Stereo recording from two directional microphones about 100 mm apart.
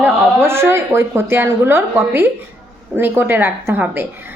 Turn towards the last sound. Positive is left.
turn(degrees=-20)  # may be behind; listen again after turning